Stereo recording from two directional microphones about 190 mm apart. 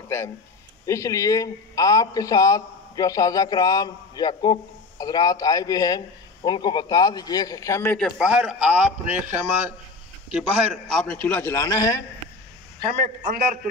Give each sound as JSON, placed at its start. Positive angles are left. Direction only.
{"t": 0.8, "sound": "a man's voice", "side_deg": 15}
{"t": 8.2, "sound": "a man's voice", "side_deg": -5}